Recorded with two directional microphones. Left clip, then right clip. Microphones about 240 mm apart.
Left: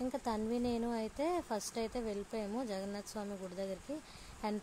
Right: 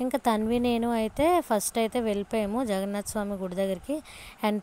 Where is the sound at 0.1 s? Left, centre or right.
Right.